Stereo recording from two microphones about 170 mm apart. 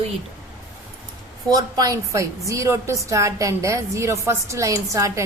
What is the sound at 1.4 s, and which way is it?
A woman's voice, 20° right (ahead or behind).